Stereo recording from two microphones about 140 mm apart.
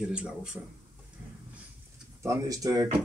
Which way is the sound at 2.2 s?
25° right (ahead or behind).